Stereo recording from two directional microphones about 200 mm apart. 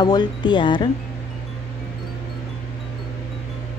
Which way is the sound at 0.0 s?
20° left (ahead or behind).